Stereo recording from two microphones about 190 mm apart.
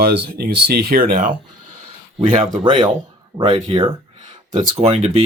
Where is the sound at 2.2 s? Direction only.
30° right (ahead or behind).